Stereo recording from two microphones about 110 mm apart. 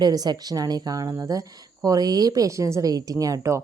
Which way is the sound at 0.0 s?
40° right (ahead or behind).